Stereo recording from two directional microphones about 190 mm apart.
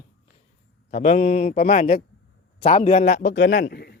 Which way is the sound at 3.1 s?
50° left (ahead or behind).